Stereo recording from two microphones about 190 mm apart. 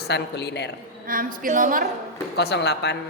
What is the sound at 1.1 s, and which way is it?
Speech, 45° right (ahead or behind).